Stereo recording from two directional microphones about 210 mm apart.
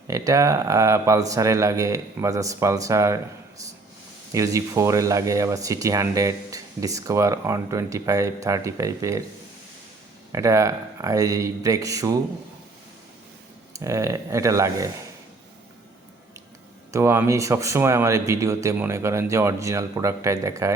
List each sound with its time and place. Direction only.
0.1 s speech: 15° right (ahead or behind)
4.3 s speech: 15° right (ahead or behind)
10.3 s speech: 15° right (ahead or behind)
13.7 s speech: 15° right (ahead or behind)
16.9 s speech: 15° right (ahead or behind)